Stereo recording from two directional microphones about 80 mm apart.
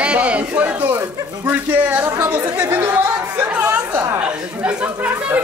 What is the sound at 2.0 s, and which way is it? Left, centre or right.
Chatter, right.